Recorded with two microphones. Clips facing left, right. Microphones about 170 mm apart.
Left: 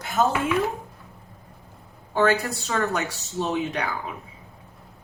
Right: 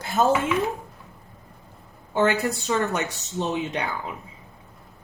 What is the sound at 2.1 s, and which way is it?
A woman's voice, 20° right (ahead or behind).